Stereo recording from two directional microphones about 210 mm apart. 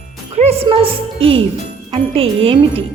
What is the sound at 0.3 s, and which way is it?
A woman's voice, 30° right (ahead or behind).